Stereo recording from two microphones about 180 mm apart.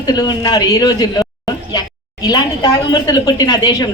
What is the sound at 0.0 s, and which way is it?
A woman's voice, 20° left (ahead or behind).